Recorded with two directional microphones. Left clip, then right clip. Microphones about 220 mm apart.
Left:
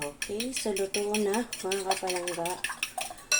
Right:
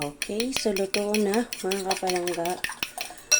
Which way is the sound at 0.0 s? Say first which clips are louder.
Right 4 dB; 45° right (ahead or behind).